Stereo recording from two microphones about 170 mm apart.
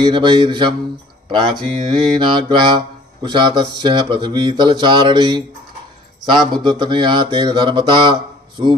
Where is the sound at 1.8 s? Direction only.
30° right (ahead or behind).